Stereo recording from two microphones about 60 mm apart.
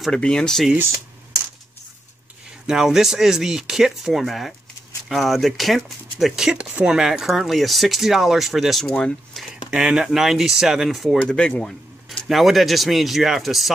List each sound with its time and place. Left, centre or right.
0.1 s speech: centre
2.6 s speech: centre
6.5 s speech: right; by 9.5 s centre
9.7 s speech: centre
11.2 s speech: centre